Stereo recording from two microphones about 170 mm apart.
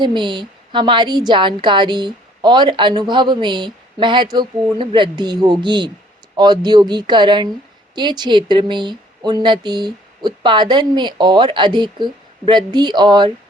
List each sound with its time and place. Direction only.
0.0 s a woman's voice: 25° right (ahead or behind)